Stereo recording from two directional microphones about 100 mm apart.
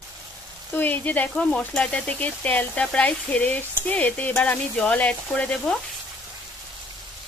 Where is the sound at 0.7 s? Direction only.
20° left (ahead or behind).